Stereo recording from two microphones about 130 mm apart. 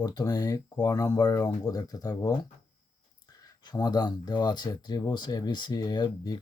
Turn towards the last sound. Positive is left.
turn(degrees=30)  # may be behind; listen again after turning